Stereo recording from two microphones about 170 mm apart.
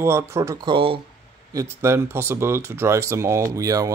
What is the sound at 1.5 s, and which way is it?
Speech, 15° right (ahead or behind).